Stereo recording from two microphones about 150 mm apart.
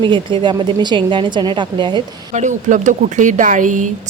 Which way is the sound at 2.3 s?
55° right (ahead or behind).